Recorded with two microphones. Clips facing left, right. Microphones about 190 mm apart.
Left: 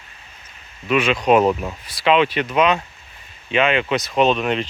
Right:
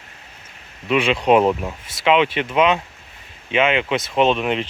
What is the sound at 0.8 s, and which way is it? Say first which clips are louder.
Speech: even; 25° right (ahead or behind).